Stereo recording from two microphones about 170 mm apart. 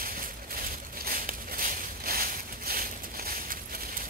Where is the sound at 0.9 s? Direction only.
55° right (ahead or behind).